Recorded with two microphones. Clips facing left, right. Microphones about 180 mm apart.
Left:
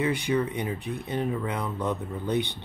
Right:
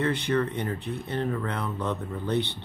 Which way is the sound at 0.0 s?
10° left (ahead or behind).